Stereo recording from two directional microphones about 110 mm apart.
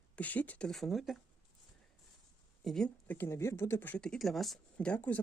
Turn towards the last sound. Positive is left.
turn(degrees=15)  # may be behind; listen again after turning